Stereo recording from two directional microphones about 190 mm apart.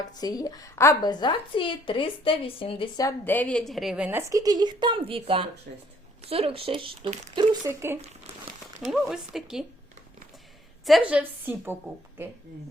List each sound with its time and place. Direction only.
0.0 s a woman's voice: 20° left (ahead or behind); by 5.5 s 30° right (ahead or behind)
5.7 s speech: 50° right (ahead or behind)
6.2 s speech: 30° right (ahead or behind)
7.3 s a woman's voice: 15° right (ahead or behind)
8.8 s speech: centre (ahead or behind)
10.8 s a woman's voice: 5° right (ahead or behind)